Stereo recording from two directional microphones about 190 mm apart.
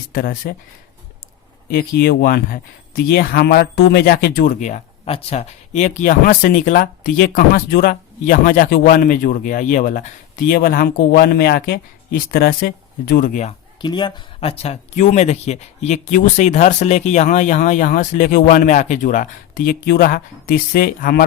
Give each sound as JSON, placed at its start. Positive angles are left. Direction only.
{"t": 0.1, "sound": "speech", "side_deg": 50}
{"t": 1.7, "sound": "speech", "side_deg": 55}
{"t": 13.8, "sound": "speech", "side_deg": 25}